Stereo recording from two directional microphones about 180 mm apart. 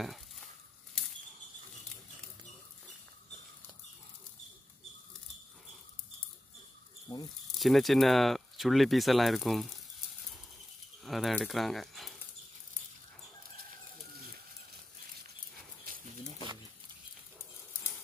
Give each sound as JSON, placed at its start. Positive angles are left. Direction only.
{"t": 0.0, "sound": "stir", "side_deg": 0}
{"t": 7.1, "sound": "snake", "side_deg": 25}
{"t": 7.5, "sound": "speech", "side_deg": 0}
{"t": 11.1, "sound": "speech", "side_deg": 0}